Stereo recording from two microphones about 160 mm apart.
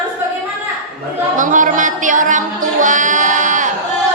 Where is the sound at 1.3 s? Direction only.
55° right (ahead or behind).